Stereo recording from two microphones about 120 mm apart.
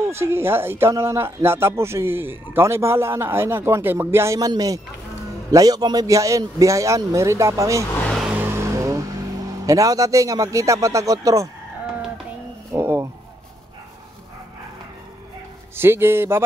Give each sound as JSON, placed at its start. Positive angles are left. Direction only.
{"t": 0.1, "sound": "speech", "side_deg": -20}
{"t": 8.2, "sound": "vehicle", "side_deg": -15}
{"t": 9.7, "sound": "speech", "side_deg": -30}
{"t": 12.7, "sound": "speech", "side_deg": -25}
{"t": 15.7, "sound": "speech", "side_deg": -20}